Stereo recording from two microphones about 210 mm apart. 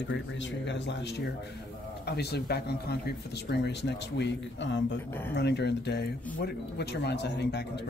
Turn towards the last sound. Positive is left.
turn(degrees=55)  # may be behind; listen again after turning